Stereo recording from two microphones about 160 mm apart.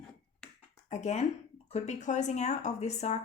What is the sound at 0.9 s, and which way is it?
Speech, 45° left (ahead or behind).